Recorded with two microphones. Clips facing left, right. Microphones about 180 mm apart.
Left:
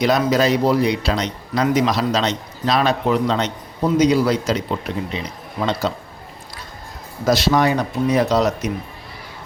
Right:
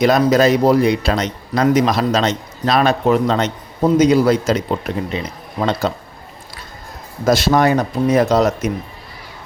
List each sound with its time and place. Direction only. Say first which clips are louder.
0.0 s a man's voice: right 4 dB; 50° right (ahead or behind)
7.3 s a man's voice: right 3 dB; 50° right (ahead or behind)